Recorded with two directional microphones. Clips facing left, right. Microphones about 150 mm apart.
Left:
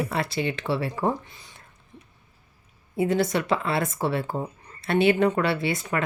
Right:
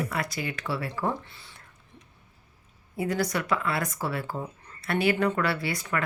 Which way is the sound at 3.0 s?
25° left (ahead or behind).